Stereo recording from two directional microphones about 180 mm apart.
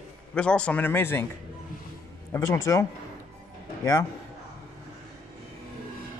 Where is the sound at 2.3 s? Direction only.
15° left (ahead or behind).